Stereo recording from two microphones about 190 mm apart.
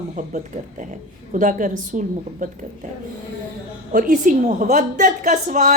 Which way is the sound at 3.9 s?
45° right (ahead or behind).